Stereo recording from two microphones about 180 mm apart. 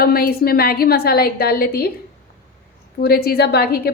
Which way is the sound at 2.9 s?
60° left (ahead or behind).